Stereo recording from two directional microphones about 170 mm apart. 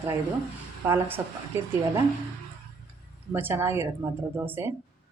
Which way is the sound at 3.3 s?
10° right (ahead or behind).